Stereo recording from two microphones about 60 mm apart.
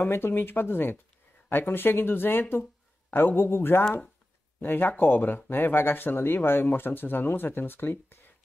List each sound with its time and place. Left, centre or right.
0.0 s speech: left